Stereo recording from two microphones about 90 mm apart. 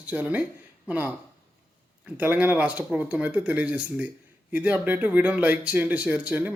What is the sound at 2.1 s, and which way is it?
Speech, 20° right (ahead or behind).